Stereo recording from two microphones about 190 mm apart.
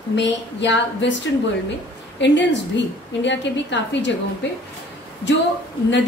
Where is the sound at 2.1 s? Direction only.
70° left (ahead or behind).